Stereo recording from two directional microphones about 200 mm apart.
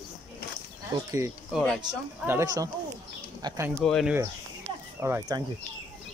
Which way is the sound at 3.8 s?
Centre (ahead or behind).